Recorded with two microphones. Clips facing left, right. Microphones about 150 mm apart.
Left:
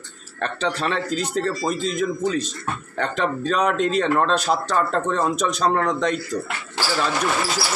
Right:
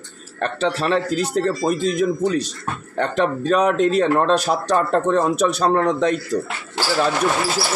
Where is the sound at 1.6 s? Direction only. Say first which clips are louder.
Right 4 dB; 55° right (ahead or behind).